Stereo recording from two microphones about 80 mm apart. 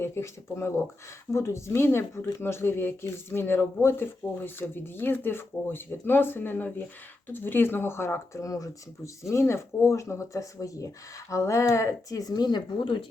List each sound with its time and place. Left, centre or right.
0.0 s speech: left